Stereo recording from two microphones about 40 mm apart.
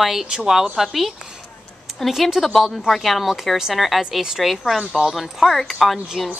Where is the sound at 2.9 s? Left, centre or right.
Centre.